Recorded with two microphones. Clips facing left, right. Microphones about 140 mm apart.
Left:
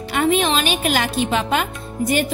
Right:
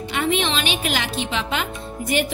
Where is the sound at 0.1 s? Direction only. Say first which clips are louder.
Left 5 dB; 45° left (ahead or behind).